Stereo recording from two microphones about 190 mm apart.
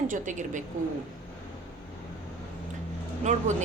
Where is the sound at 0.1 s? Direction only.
40° right (ahead or behind).